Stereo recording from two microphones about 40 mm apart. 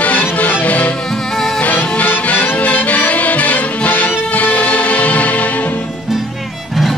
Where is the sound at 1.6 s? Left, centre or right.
Left.